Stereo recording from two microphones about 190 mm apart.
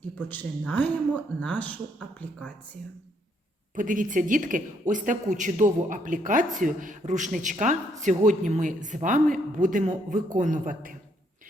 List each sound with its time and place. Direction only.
0.2 s speech: 10° left (ahead or behind)
3.8 s speech: 45° right (ahead or behind)